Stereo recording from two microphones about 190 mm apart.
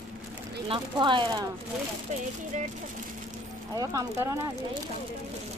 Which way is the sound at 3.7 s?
20° right (ahead or behind).